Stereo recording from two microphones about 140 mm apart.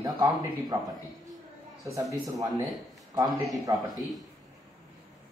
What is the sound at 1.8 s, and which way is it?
Speech, 25° right (ahead or behind).